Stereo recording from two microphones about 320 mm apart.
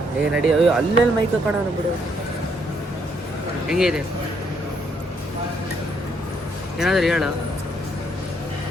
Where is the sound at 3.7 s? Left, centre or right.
Centre.